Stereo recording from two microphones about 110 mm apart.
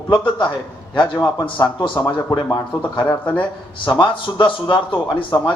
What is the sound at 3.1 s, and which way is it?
Speech, 20° left (ahead or behind).